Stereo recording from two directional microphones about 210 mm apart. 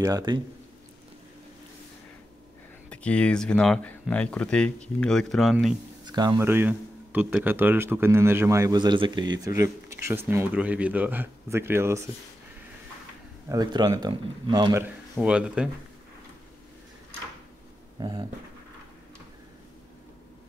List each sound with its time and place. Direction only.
0.0 s speech: 20° right (ahead or behind)
2.9 s speech: 5° left (ahead or behind)
6.0 s speech: 20° right (ahead or behind)
13.5 s speech: 20° right (ahead or behind); by 15.7 s 5° right (ahead or behind)
17.9 s speech: 20° right (ahead or behind)